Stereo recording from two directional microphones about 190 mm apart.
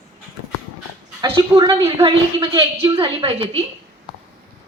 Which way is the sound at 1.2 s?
20° right (ahead or behind).